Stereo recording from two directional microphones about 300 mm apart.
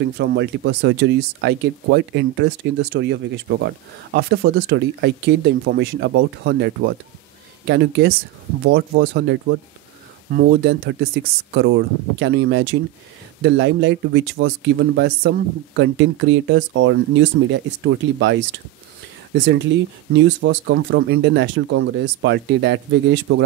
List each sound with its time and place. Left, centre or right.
0.2 s speech: right